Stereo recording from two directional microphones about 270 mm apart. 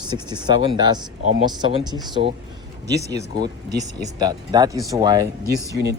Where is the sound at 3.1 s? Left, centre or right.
Centre.